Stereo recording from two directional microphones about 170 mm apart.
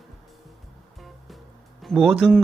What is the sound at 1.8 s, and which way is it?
Speech, centre (ahead or behind).